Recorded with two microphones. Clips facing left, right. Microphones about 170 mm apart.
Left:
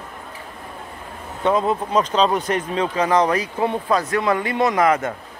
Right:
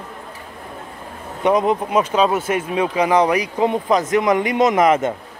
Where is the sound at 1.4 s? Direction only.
15° right (ahead or behind).